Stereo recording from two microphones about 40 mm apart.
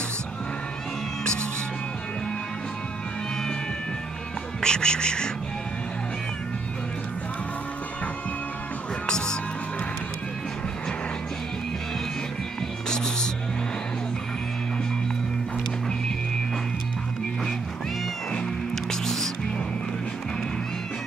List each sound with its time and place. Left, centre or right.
4.6 s speech: centre
9.0 s music: centre
12.9 s music: centre
18.9 s music: centre